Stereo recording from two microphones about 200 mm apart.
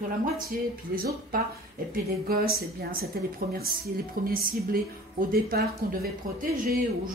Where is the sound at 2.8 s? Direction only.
50° right (ahead or behind).